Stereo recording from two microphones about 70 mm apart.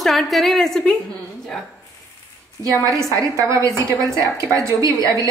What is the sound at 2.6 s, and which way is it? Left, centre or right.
A woman's voice, right.